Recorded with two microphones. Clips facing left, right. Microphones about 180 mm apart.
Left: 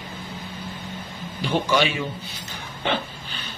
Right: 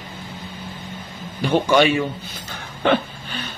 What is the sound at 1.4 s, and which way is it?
Speech, 50° right (ahead or behind).